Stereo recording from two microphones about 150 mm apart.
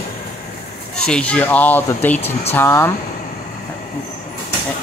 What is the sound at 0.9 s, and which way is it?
Speech, 5° left (ahead or behind).